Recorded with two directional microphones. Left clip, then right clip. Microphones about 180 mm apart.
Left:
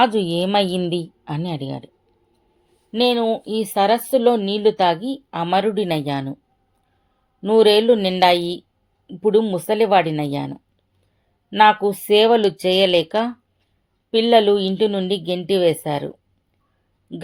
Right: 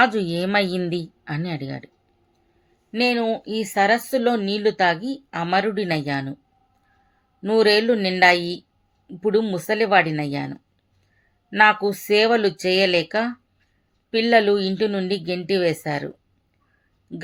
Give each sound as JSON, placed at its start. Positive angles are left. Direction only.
{"t": 0.0, "sound": "speech", "side_deg": 15}
{"t": 2.9, "sound": "speech", "side_deg": 20}
{"t": 7.4, "sound": "speech", "side_deg": 20}